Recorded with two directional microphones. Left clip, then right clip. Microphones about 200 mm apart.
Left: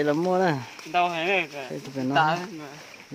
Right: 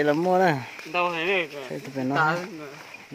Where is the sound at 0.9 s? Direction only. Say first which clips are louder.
Left 1 dB; 35° left (ahead or behind).